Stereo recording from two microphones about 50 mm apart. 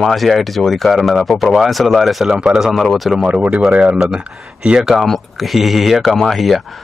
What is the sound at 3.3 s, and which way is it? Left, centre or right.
Speech, right.